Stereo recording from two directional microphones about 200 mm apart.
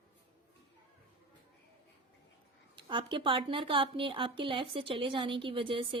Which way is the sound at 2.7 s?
25° right (ahead or behind).